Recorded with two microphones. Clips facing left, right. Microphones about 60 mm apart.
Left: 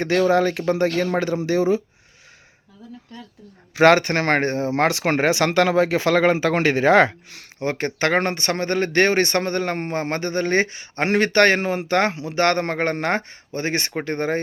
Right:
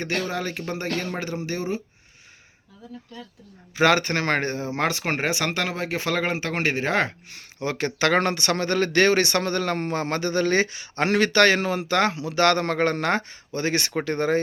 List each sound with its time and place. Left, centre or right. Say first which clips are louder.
0.0 s speech: left 10 dB; left
3.8 s speech: left 5 dB; left
7.6 s speech: left 2 dB; left